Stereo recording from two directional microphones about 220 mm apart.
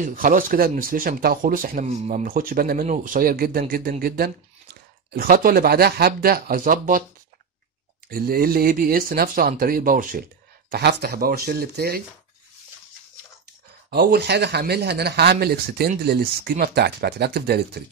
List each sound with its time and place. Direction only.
0.0 s speech: 40° right (ahead or behind)
5.1 s speech: 40° right (ahead or behind)
8.1 s speech: 40° right (ahead or behind)
13.8 s speech: 45° right (ahead or behind)